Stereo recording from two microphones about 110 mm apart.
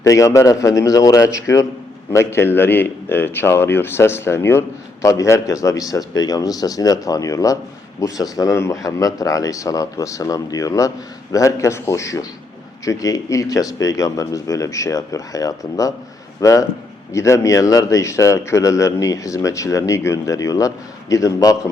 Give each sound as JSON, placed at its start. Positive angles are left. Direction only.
{"t": 0.0, "sound": "speech", "side_deg": 30}